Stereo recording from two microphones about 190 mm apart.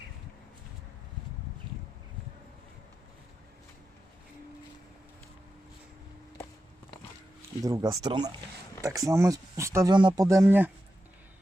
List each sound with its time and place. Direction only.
7.6 s speech: 20° right (ahead or behind)